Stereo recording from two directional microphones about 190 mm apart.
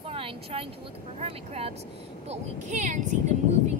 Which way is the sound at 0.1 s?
30° right (ahead or behind).